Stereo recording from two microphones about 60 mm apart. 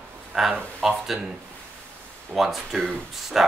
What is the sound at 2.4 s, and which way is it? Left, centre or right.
Speech, centre.